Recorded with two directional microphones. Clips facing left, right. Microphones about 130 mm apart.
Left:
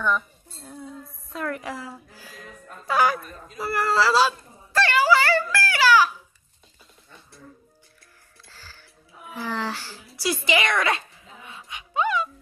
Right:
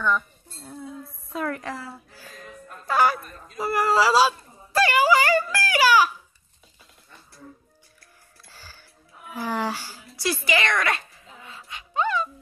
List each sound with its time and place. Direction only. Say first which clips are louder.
0.0 s chink: even; centre (ahead or behind)
1.6 s speech: even; 15° left (ahead or behind)
2.4 s music: even; centre (ahead or behind)
3.5 s a sound: right 2 dB; 15° right (ahead or behind)
8.5 s music: right 1 dB; 15° right (ahead or behind)
9.3 s speech: right 2 dB; 15° right (ahead or behind)
10.2 s a sound: left 1 dB; 20° left (ahead or behind)